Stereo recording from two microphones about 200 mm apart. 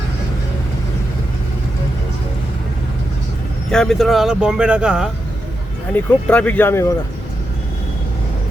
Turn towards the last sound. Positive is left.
turn(degrees=10)  # may be behind; listen again after turning